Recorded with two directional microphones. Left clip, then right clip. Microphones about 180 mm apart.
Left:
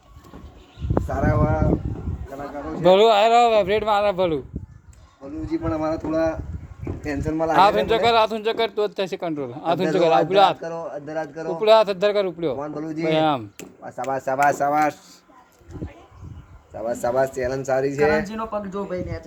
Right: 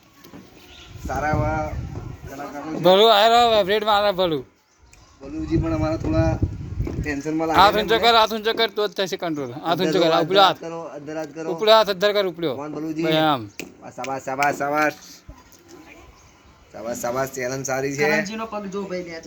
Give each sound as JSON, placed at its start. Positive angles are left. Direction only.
{"t": 1.0, "sound": "speech", "side_deg": 30}
{"t": 2.8, "sound": "speech", "side_deg": 0}
{"t": 5.5, "sound": "speech", "side_deg": 30}
{"t": 7.5, "sound": "speech", "side_deg": 0}
{"t": 10.6, "sound": "speech", "side_deg": 35}
{"t": 11.6, "sound": "speech", "side_deg": 0}
{"t": 12.5, "sound": "speech", "side_deg": 35}
{"t": 13.0, "sound": "speech", "side_deg": 0}
{"t": 14.3, "sound": "speech", "side_deg": 50}
{"t": 16.7, "sound": "speech", "side_deg": 35}
{"t": 18.3, "sound": "speech", "side_deg": 20}